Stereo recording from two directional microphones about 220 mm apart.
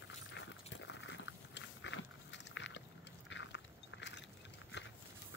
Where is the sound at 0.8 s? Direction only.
55° left (ahead or behind).